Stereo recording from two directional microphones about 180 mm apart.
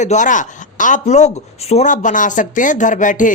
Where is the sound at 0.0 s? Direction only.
40° left (ahead or behind).